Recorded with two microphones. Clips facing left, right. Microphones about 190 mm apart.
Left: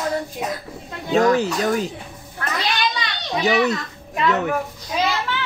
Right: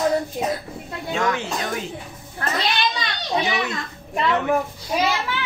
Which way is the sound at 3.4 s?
40° left (ahead or behind).